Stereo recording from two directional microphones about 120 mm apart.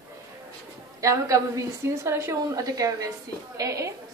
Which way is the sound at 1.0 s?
25° right (ahead or behind).